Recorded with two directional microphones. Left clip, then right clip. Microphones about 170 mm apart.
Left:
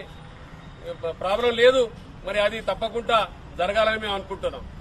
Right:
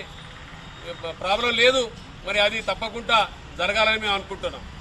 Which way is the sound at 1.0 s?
Centre (ahead or behind).